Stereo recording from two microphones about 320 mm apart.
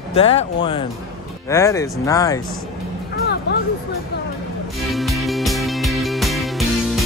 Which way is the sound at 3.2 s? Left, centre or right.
Left.